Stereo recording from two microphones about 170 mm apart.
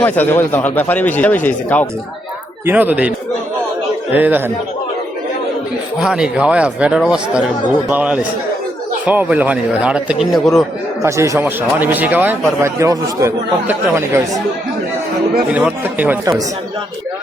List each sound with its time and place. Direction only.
0.0 s speech: 10° left (ahead or behind)
2.6 s speech: 10° right (ahead or behind)
4.1 s speech: 10° right (ahead or behind)
6.0 s speech: 5° right (ahead or behind)
11.0 s speech: 15° right (ahead or behind)
15.4 s speech: 10° right (ahead or behind)